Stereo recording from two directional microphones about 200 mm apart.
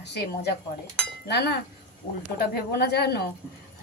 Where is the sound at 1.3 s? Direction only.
55° left (ahead or behind).